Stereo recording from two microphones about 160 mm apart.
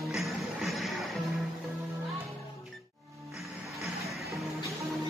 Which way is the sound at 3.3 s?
Centre (ahead or behind).